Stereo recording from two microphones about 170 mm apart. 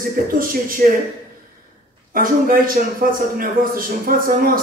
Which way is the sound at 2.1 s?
55° right (ahead or behind).